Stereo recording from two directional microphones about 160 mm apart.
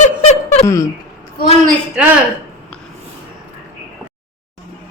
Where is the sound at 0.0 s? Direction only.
45° left (ahead or behind).